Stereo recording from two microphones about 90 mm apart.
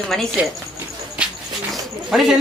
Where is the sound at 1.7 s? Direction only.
5° right (ahead or behind).